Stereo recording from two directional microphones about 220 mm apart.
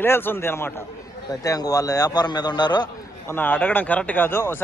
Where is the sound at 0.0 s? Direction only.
10° left (ahead or behind).